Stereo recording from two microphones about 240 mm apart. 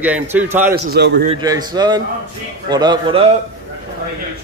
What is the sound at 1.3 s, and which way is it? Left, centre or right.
A man's voice, centre.